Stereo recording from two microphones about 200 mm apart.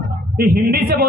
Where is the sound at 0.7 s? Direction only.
50° right (ahead or behind).